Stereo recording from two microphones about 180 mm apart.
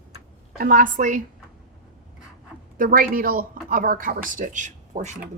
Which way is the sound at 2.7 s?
50° right (ahead or behind).